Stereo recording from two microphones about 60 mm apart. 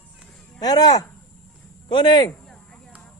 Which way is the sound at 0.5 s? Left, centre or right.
Left.